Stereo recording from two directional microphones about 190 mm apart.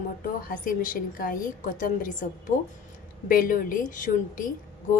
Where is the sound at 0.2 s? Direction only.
45° left (ahead or behind).